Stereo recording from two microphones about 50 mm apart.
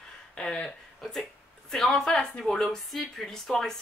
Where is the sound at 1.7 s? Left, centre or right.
Centre.